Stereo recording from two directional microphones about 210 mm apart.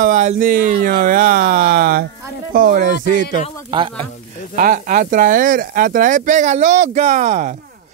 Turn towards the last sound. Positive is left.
turn(degrees=-35)  # may be behind; listen again after turning